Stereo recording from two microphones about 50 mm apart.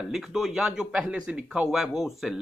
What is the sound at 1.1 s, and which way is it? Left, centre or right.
Speech, right.